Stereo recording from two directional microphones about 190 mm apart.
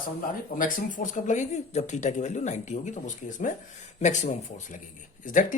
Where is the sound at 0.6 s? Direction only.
45° left (ahead or behind).